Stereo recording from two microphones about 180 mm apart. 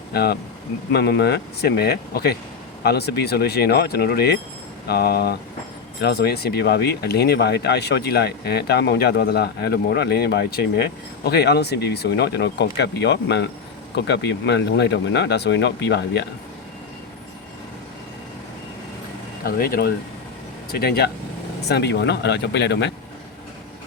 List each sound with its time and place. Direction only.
0.1 s speech: 60° left (ahead or behind)
19.5 s speech: 55° left (ahead or behind); by 22.9 s 70° left (ahead or behind)